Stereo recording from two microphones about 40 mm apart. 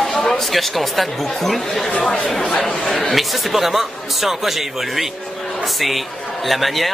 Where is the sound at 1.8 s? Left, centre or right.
Centre.